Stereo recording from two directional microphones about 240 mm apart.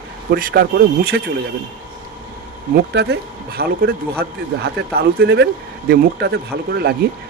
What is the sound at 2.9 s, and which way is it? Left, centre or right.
Speech, right.